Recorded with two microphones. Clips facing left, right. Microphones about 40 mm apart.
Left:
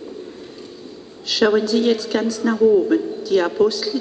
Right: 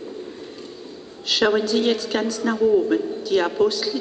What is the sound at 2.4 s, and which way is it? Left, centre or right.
Speech, centre.